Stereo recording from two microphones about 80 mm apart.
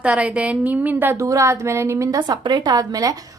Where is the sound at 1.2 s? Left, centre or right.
Right.